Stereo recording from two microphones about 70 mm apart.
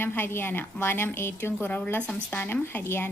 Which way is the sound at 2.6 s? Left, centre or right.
Left.